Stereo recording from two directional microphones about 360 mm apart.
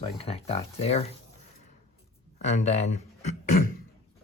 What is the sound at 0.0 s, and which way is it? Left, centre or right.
Speech, centre.